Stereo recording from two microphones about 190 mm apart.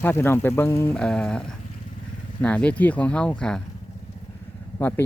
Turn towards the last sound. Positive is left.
turn(degrees=10)  # may be behind; listen again after turning